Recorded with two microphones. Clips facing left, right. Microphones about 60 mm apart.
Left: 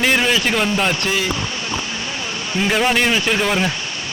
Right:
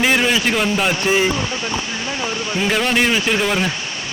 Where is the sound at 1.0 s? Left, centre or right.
Right.